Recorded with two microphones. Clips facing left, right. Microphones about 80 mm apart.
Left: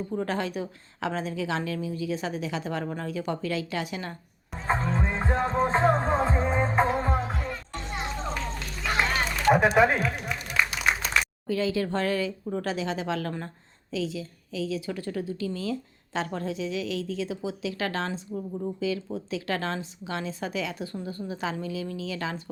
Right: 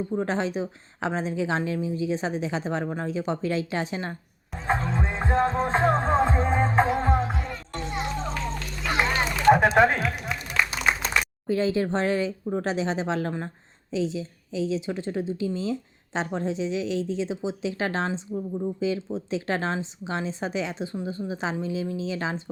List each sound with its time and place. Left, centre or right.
0.1 s a woman's voice: right
4.5 s music: centre
8.8 s run: centre
9.7 s speech: centre
10.6 s applause: centre
11.4 s a woman's voice: right